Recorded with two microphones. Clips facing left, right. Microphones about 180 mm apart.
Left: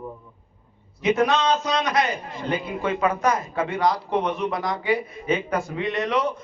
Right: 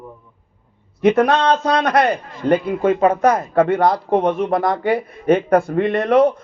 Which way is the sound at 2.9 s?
30° right (ahead or behind).